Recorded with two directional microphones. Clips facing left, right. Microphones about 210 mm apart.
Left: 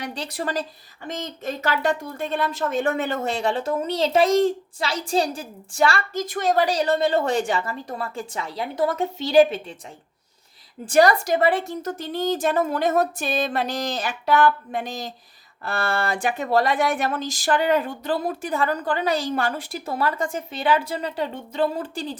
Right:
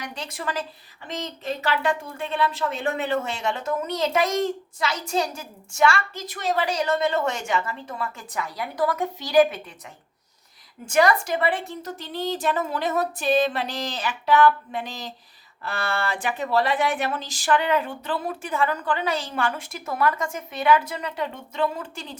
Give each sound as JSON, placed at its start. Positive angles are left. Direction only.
{"t": 0.0, "sound": "a woman's voice", "side_deg": 35}
{"t": 10.8, "sound": "a woman's voice", "side_deg": 35}